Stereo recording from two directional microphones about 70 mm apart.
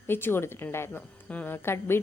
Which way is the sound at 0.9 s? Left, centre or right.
Left.